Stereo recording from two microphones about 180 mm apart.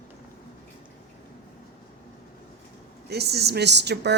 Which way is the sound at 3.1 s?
65° right (ahead or behind).